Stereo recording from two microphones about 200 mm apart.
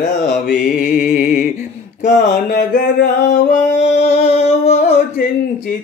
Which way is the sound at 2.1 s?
45° left (ahead or behind).